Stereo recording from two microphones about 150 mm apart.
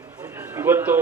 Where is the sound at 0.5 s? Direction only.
15° right (ahead or behind).